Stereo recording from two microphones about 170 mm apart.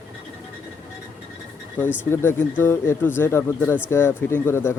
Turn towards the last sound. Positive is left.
turn(degrees=15)  # may be behind; listen again after turning